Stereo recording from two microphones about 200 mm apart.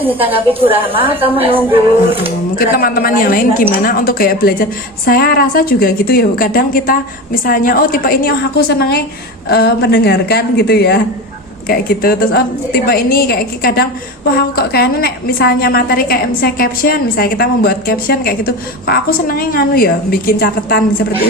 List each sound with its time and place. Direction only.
0.3 s a woman's voice: 25° right (ahead or behind)
1.0 s a woman's voice: 10° right (ahead or behind)
2.6 s a woman's voice: 45° left (ahead or behind)